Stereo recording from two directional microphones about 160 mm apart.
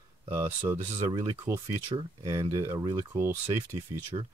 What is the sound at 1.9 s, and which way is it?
Speech, 30° right (ahead or behind).